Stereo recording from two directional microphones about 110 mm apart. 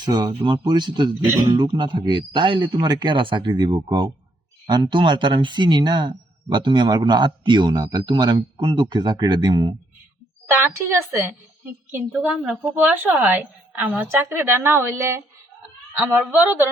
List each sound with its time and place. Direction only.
0.0 s speech: 40° right (ahead or behind)
10.6 s a woman's voice: 20° right (ahead or behind)
12.3 s a woman's voice: 10° right (ahead or behind); by 15.2 s 25° right (ahead or behind)